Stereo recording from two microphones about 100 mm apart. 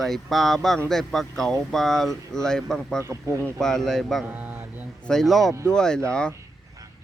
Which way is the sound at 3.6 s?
5° left (ahead or behind).